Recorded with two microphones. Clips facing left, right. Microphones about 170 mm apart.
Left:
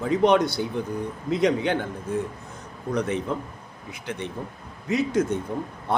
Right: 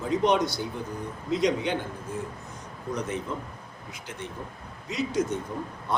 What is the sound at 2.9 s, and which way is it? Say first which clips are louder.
A man's voice: left 6 dB; 65° left (ahead or behind).